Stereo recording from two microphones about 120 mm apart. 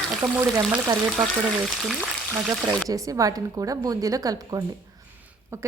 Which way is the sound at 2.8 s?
30° right (ahead or behind).